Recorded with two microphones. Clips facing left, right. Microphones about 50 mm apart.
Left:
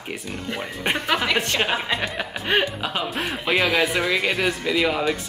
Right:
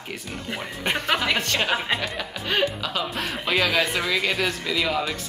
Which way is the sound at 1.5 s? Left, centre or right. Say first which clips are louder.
Left 1 dB; centre.